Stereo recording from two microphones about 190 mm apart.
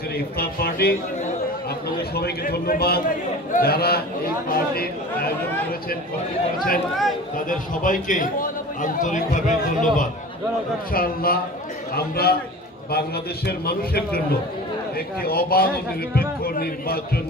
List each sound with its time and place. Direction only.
0.4 s a man's voice: 55° left (ahead or behind)
2.0 s a man's voice: 55° left (ahead or behind)
7.3 s a man's voice: 45° left (ahead or behind)